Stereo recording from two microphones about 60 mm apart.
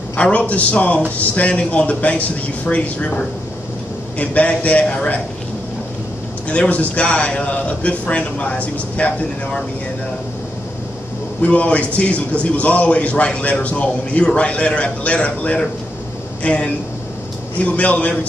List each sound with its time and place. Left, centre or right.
0.1 s a man's voice: left
6.5 s a man's voice: left
11.4 s a man's voice: left
17.7 s a man's voice: left